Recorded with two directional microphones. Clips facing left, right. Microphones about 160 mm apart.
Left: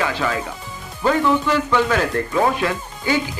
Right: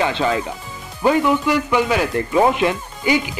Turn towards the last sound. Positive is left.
turn(degrees=-15)  # may be behind; listen again after turning